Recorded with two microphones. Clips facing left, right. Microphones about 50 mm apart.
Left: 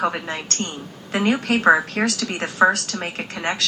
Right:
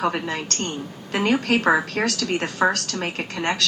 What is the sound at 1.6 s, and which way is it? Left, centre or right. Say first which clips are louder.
Speech: left 3 dB; left.